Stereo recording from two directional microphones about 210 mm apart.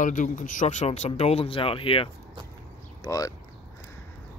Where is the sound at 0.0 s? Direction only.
40° left (ahead or behind); by 3.3 s 15° left (ahead or behind).